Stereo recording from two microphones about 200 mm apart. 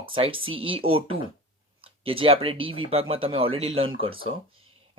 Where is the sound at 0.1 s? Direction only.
25° right (ahead or behind).